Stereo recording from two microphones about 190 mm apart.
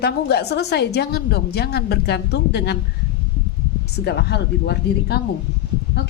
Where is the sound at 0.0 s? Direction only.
60° left (ahead or behind).